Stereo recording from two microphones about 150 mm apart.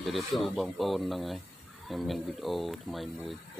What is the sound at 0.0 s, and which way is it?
Speech, centre (ahead or behind).